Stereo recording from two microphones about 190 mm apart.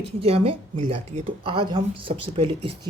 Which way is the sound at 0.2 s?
30° right (ahead or behind).